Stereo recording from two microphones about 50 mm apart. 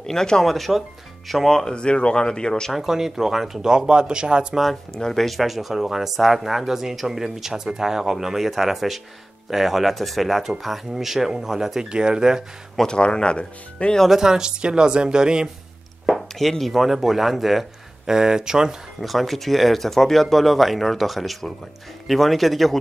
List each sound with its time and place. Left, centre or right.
0.0 s speech: centre
2.7 s speech: centre
4.9 s speech: centre
12.7 s speech: centre
14.0 s speech: centre
16.1 s speech: centre
18.9 s speech: centre